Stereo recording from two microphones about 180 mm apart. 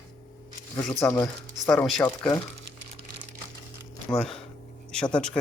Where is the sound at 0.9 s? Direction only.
15° left (ahead or behind).